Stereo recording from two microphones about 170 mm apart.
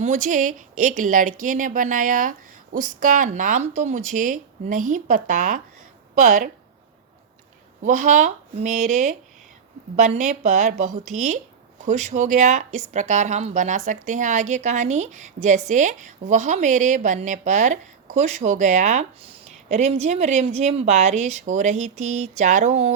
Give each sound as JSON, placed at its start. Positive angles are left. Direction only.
{"t": 0.0, "sound": "a woman's voice", "side_deg": -45}
{"t": 7.8, "sound": "a woman's voice", "side_deg": -45}